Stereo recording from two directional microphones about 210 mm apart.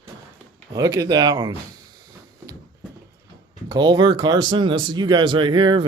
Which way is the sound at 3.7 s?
20° right (ahead or behind).